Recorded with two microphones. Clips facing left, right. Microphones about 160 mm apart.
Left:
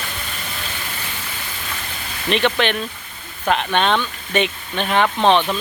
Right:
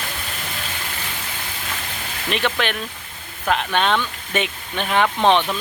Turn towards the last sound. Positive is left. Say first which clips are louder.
# left 1 dB
turn(degrees=15)  # may be behind; listen again after turning